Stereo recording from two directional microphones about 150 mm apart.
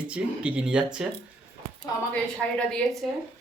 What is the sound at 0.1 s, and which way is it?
Speech, 10° right (ahead or behind).